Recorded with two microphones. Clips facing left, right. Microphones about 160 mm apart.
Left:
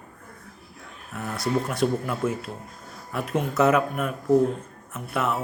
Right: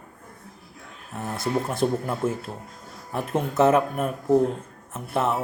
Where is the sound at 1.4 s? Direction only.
25° right (ahead or behind).